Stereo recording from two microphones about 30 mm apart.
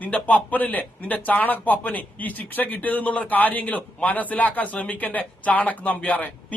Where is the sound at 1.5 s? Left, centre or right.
Left.